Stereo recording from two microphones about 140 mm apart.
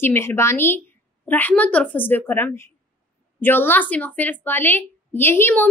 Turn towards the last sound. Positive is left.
turn(degrees=15)  # may be behind; listen again after turning